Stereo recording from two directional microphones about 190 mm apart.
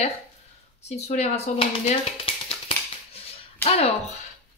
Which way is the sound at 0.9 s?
35° left (ahead or behind).